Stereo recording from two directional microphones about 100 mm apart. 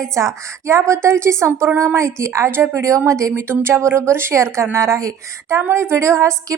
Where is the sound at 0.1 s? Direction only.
30° right (ahead or behind).